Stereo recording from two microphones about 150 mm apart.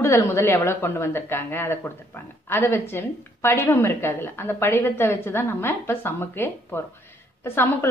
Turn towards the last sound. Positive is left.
turn(degrees=15)  # may be behind; listen again after turning